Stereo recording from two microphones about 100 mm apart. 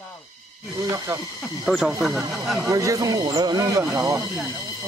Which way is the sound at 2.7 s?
35° right (ahead or behind).